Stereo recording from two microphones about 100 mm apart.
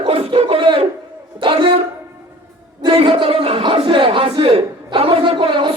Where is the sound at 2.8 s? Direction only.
70° right (ahead or behind).